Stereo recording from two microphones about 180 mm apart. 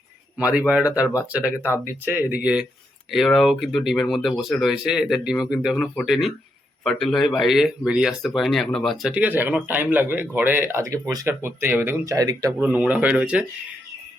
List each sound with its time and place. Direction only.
0.3 s speech: 5° right (ahead or behind)
12.5 s speech: 5° right (ahead or behind)